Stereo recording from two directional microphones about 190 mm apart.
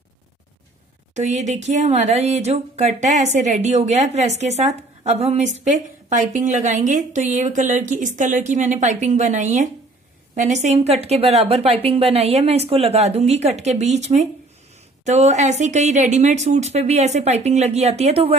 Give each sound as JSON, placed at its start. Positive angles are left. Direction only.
{"t": 1.1, "sound": "speech", "side_deg": -40}